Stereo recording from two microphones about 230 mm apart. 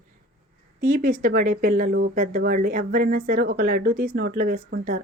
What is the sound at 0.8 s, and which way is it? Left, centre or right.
Speech, right.